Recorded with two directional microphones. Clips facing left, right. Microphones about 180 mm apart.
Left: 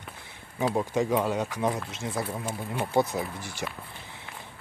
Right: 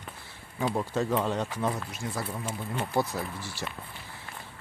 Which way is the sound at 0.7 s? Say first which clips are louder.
Left 2 dB; 15° left (ahead or behind).